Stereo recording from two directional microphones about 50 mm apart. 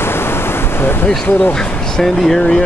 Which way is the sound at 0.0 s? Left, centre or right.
Left.